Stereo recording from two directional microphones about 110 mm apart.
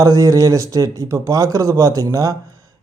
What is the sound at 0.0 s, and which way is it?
Speech, 30° right (ahead or behind).